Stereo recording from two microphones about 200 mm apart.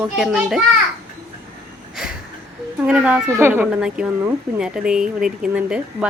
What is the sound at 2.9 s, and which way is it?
A child's voice, 5° right (ahead or behind).